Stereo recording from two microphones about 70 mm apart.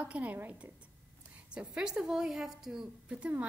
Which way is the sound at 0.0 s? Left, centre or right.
Centre.